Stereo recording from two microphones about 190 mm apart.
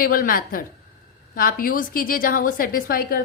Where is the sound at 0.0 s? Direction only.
50° left (ahead or behind).